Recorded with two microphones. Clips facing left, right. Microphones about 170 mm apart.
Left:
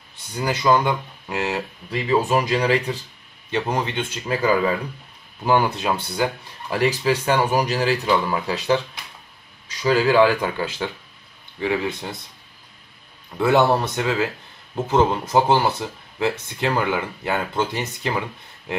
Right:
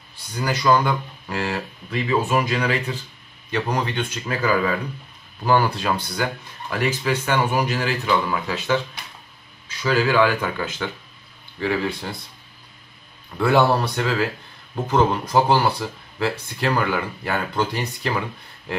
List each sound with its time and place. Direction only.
0.4 s speech: 25° left (ahead or behind)
1.9 s speech: 35° left (ahead or behind)
11.6 s speech: 15° left (ahead or behind)
13.4 s speech: 20° left (ahead or behind)